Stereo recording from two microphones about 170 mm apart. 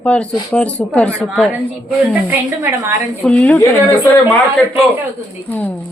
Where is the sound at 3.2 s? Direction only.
5° left (ahead or behind).